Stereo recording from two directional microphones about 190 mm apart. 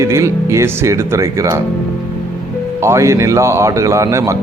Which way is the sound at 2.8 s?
15° right (ahead or behind).